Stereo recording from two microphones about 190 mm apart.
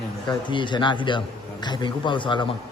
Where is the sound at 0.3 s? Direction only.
25° left (ahead or behind).